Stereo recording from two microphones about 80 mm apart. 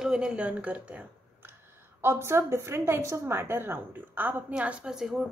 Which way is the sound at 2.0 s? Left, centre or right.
Right.